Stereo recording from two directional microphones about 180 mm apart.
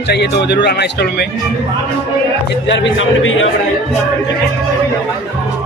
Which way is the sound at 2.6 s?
90° left.